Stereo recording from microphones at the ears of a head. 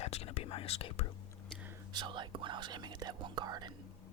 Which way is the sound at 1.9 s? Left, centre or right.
Right.